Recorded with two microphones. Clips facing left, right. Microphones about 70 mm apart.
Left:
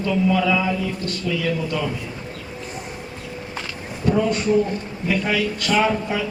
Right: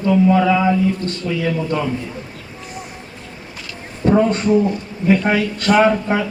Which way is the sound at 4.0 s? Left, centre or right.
Right.